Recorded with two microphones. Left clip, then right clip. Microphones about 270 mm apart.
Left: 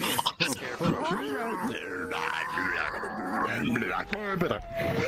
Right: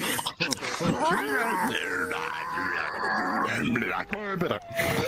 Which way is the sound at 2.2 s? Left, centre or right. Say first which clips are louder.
Even; centre.